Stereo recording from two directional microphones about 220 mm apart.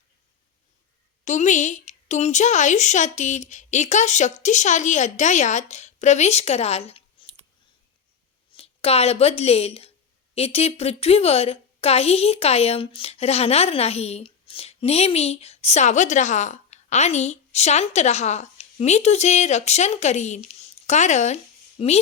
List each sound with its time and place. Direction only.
1.2 s a woman's voice: 35° left (ahead or behind)
8.5 s a woman's voice: 25° left (ahead or behind)